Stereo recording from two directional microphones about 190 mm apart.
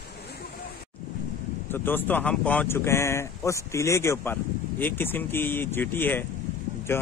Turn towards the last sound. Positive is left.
turn(degrees=10)  # may be behind; listen again after turning